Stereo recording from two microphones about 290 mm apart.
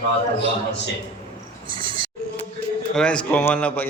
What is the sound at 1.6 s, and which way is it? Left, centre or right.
Insect, centre.